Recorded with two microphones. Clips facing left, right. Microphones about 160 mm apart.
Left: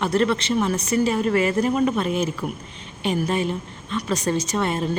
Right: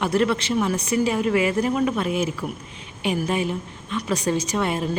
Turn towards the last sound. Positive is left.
turn(degrees=-10)  # may be behind; listen again after turning